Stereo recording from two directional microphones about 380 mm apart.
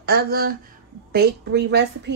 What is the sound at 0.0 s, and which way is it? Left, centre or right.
Speech, right.